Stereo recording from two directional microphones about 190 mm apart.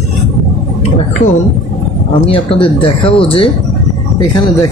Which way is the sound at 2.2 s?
30° left (ahead or behind).